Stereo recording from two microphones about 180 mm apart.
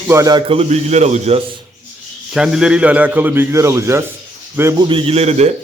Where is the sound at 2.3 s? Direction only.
5° right (ahead or behind).